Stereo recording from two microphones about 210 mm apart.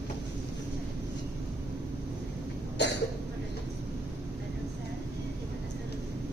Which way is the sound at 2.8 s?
55° left (ahead or behind).